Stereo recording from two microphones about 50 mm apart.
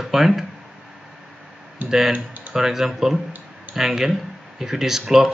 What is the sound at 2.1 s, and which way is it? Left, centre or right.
Speech, right.